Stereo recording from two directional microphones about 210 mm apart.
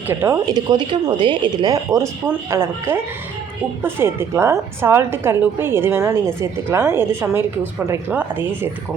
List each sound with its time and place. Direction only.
0.1 s a woman's voice: 10° right (ahead or behind)